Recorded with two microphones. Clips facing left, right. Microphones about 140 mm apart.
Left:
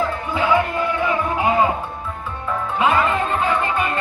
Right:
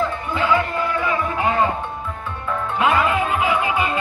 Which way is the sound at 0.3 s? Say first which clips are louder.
Left 1 dB; 10° left (ahead or behind).